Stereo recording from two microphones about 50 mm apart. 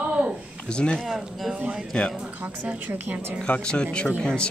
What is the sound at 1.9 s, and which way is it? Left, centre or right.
Speech, centre.